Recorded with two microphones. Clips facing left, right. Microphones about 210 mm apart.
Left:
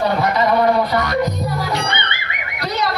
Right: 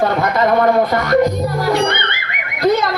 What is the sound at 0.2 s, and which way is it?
A man's voice, 50° right (ahead or behind).